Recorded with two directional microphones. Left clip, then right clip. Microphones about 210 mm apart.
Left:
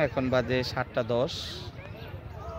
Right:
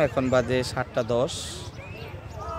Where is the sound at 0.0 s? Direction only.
10° right (ahead or behind).